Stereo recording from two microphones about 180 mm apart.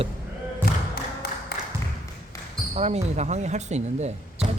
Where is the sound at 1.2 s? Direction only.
60° left (ahead or behind).